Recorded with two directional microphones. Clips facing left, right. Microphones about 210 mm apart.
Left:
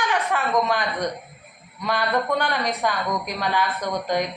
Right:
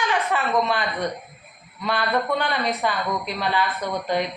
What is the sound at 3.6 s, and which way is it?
Speech, 5° right (ahead or behind).